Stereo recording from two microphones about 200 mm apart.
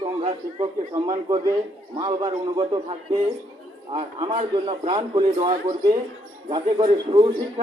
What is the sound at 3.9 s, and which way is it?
A man's voice, 25° right (ahead or behind).